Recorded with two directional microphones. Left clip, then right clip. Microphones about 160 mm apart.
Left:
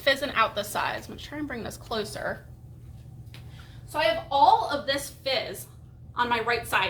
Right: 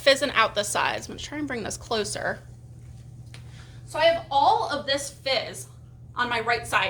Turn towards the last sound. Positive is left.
turn(degrees=-5)  # may be behind; listen again after turning